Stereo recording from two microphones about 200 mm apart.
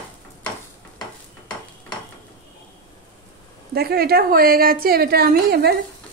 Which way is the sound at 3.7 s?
50° right (ahead or behind).